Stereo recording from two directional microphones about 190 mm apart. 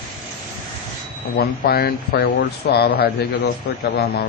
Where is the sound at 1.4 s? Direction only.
55° left (ahead or behind).